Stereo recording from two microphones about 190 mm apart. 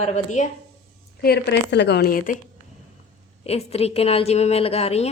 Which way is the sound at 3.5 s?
35° left (ahead or behind).